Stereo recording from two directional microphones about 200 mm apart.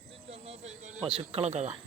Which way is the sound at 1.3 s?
30° right (ahead or behind).